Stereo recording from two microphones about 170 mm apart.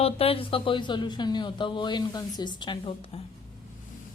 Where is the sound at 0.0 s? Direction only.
35° left (ahead or behind).